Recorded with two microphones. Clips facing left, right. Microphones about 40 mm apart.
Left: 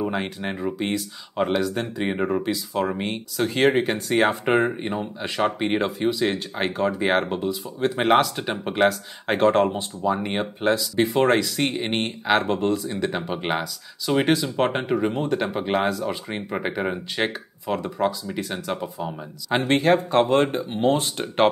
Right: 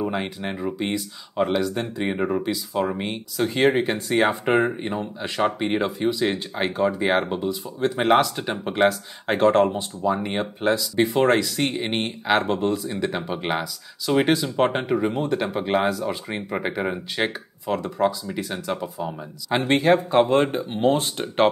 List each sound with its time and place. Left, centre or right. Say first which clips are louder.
0.0 s speech: even; centre
17.6 s speech: right 1 dB; centre
18.0 s speech: right 2 dB; centre